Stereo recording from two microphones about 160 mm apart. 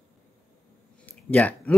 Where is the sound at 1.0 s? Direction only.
10° left (ahead or behind).